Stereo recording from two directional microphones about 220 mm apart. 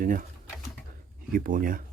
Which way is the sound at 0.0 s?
40° right (ahead or behind).